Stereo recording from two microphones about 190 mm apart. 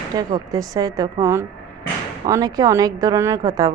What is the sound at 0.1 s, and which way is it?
Speech, 20° right (ahead or behind).